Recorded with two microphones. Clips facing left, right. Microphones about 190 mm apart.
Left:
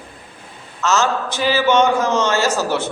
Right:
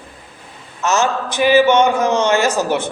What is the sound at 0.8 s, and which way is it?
A man's voice, 15° right (ahead or behind).